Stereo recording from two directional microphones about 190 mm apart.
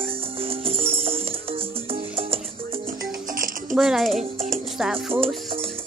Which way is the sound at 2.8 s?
45° right (ahead or behind).